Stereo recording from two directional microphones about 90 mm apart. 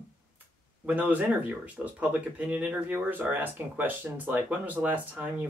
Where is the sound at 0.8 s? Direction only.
15° right (ahead or behind).